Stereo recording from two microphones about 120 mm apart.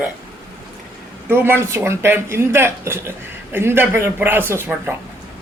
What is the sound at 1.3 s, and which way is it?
Speech, 20° right (ahead or behind).